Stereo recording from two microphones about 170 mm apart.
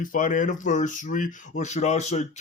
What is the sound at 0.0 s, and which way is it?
Speech, 50° left (ahead or behind).